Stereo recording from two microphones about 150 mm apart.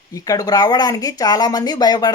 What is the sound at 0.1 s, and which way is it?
Speech, 25° left (ahead or behind).